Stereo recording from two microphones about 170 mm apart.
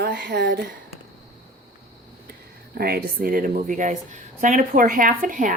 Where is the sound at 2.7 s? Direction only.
65° right (ahead or behind).